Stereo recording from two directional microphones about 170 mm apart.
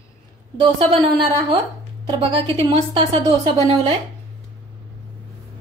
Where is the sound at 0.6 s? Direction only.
25° right (ahead or behind).